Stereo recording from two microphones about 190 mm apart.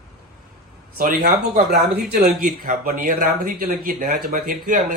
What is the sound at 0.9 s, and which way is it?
Speech, 45° right (ahead or behind).